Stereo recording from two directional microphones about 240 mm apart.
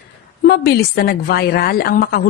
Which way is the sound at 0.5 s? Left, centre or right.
Left.